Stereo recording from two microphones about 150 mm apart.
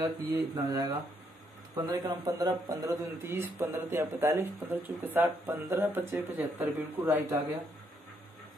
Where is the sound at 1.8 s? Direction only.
25° right (ahead or behind).